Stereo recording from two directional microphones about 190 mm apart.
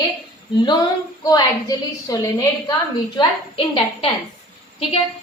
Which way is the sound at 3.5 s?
30° left (ahead or behind).